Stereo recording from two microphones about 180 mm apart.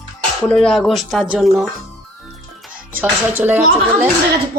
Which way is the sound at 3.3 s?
10° right (ahead or behind).